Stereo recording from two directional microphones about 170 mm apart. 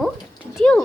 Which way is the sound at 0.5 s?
5° left (ahead or behind).